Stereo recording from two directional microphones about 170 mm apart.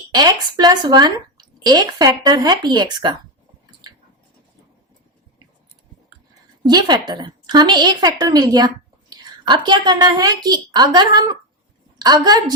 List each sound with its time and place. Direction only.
0.1 s a woman's voice: 25° right (ahead or behind)
6.7 s a woman's voice: 25° right (ahead or behind)